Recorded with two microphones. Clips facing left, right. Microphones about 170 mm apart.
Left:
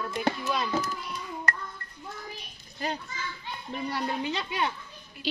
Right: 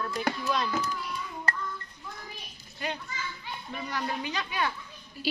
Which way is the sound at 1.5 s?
30° right (ahead or behind).